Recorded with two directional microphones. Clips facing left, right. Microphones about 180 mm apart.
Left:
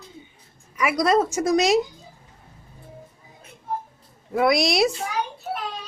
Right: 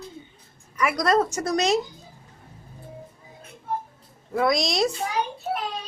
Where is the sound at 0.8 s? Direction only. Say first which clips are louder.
Left 2 dB; 10° left (ahead or behind).